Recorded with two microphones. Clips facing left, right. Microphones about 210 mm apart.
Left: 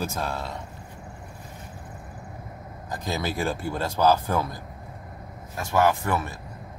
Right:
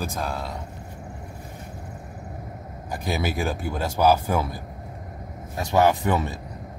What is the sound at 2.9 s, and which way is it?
A man's voice, 10° right (ahead or behind).